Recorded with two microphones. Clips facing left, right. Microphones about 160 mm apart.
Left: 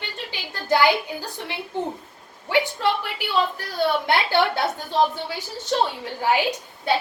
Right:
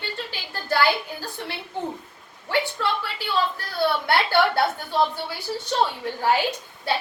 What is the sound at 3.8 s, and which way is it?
Speech, 15° left (ahead or behind).